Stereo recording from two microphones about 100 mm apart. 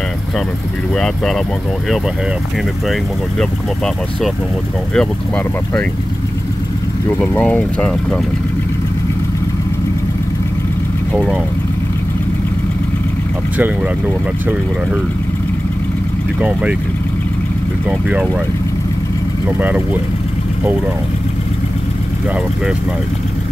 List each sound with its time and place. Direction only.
0.9 s speech: 5° left (ahead or behind)
2.9 s speech: 5° left (ahead or behind)
7.2 s speech: 15° left (ahead or behind)
16.3 s speech: 15° right (ahead or behind)
17.8 s speech: 10° right (ahead or behind)
19.6 s speech: 15° right (ahead or behind)